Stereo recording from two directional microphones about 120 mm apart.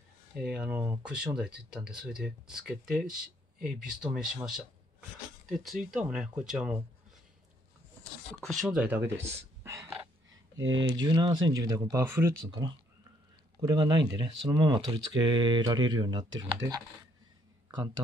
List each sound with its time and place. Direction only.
0.4 s speech: 10° right (ahead or behind)
8.4 s speech: 5° left (ahead or behind)
8.6 s speech: 15° right (ahead or behind)
10.8 s speech: 35° right (ahead or behind); by 12.4 s 20° right (ahead or behind)
13.6 s speech: 35° right (ahead or behind)
17.6 s speech: 40° right (ahead or behind)